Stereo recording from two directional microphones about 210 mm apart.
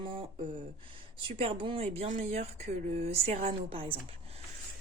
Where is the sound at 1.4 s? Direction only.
25° right (ahead or behind).